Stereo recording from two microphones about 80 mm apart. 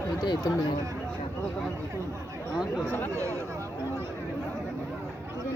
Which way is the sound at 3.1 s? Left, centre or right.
Right.